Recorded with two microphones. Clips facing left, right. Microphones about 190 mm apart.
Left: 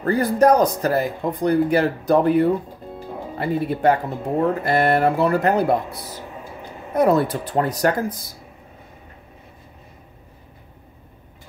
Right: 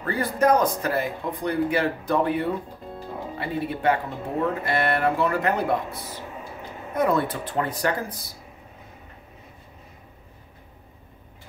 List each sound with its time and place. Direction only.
0.0 s speech: 40° left (ahead or behind)